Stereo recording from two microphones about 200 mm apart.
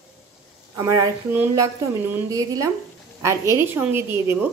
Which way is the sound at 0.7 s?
15° right (ahead or behind).